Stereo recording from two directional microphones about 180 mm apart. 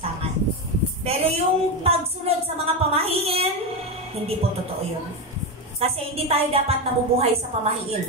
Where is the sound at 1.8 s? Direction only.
35° right (ahead or behind).